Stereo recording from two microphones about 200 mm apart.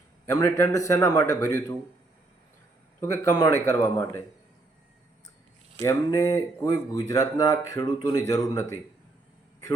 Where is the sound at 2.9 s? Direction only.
10° left (ahead or behind).